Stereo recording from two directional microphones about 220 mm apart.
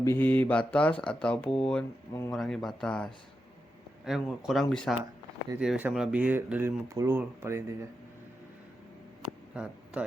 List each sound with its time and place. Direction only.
0.0 s mantra: 10° left (ahead or behind)
1.0 s speech: 5° left (ahead or behind); by 7.8 s 10° right (ahead or behind)